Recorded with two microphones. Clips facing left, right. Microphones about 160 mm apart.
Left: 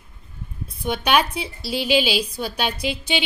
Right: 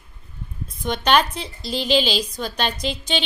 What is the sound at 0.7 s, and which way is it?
A woman's voice, 10° left (ahead or behind).